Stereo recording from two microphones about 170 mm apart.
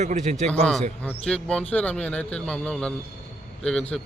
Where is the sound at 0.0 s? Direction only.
45° right (ahead or behind).